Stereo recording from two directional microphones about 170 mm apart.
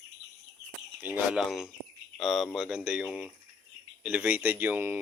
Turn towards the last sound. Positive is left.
turn(degrees=-10)  # may be behind; listen again after turning